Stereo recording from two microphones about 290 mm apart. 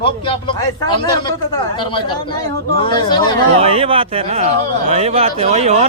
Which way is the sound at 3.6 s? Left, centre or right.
Centre.